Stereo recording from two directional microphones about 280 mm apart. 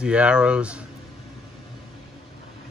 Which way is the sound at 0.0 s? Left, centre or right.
Centre.